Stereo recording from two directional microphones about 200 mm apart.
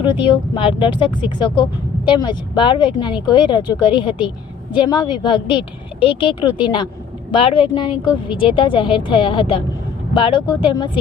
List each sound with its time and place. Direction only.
0.1 s speech: 25° left (ahead or behind)